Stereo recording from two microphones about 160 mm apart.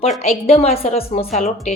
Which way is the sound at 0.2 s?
40° left (ahead or behind).